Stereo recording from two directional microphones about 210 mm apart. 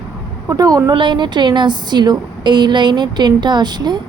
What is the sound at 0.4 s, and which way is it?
A woman's voice, 15° right (ahead or behind).